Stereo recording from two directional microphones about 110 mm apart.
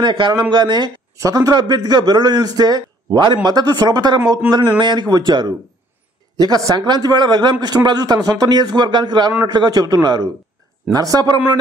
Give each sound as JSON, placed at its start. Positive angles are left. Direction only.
{"t": 0.0, "sound": "speech", "side_deg": -45}
{"t": 1.1, "sound": "a man's voice", "side_deg": -30}